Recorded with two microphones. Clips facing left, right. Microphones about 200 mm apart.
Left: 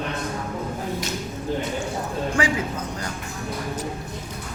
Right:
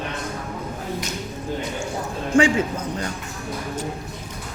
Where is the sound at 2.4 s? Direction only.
25° right (ahead or behind).